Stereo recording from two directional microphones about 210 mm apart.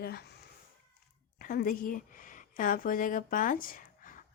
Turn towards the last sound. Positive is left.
turn(degrees=40)  # may be behind; listen again after turning